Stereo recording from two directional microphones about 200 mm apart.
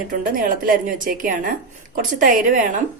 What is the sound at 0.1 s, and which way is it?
Speech, 45° right (ahead or behind).